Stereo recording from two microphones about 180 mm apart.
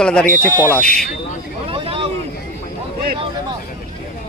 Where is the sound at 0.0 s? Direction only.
5° left (ahead or behind).